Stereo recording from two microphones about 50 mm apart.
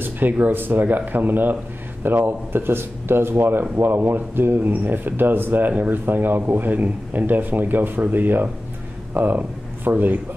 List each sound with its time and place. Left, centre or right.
0.0 s speech: right